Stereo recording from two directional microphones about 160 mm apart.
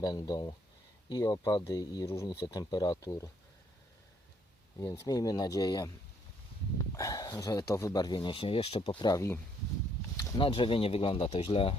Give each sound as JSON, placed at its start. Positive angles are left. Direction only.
{"t": 0.0, "sound": "speech", "side_deg": 25}
{"t": 4.8, "sound": "speech", "side_deg": 25}
{"t": 6.9, "sound": "speech", "side_deg": 20}
{"t": 10.2, "sound": "a sound", "side_deg": 20}
{"t": 10.4, "sound": "speech", "side_deg": 35}